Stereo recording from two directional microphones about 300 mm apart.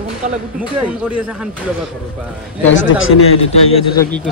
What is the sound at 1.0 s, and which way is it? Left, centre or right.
Speech, centre.